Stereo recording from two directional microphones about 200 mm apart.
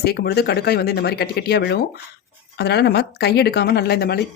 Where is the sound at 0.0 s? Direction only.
55° left (ahead or behind).